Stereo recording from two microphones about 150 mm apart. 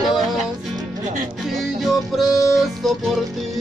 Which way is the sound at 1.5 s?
Centre (ahead or behind).